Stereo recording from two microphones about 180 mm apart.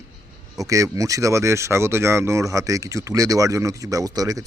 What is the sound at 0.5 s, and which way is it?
Speech, 20° right (ahead or behind).